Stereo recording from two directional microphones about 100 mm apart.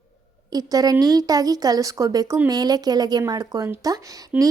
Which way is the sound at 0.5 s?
40° right (ahead or behind).